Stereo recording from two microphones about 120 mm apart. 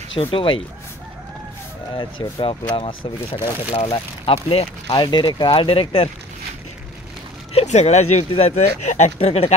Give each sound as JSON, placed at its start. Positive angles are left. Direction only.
{"t": 0.2, "sound": "speech", "side_deg": 45}
{"t": 2.0, "sound": "speech", "side_deg": 40}
{"t": 4.9, "sound": "speech", "side_deg": 40}
{"t": 7.5, "sound": "speech", "side_deg": 65}